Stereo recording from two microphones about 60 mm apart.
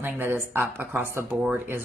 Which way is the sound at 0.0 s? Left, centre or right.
Right.